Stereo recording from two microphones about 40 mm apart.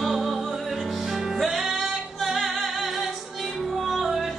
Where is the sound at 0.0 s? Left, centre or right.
Centre.